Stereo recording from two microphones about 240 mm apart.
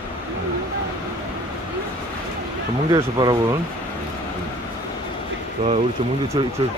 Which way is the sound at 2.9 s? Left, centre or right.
Centre.